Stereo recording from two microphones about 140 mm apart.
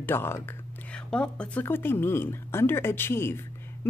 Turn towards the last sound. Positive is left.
turn(degrees=15)  # may be behind; listen again after turning